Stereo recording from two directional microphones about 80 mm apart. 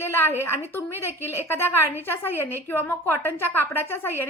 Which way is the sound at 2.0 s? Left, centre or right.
Left.